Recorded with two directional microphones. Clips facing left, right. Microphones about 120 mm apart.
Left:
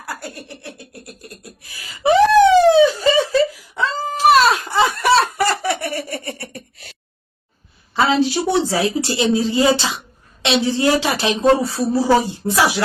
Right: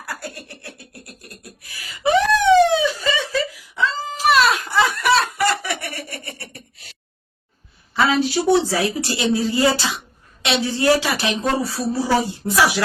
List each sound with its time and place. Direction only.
0.0 s beatboxing: 25° left (ahead or behind)
2.8 s whimper: 35° left (ahead or behind)
7.9 s a woman's voice: 25° left (ahead or behind)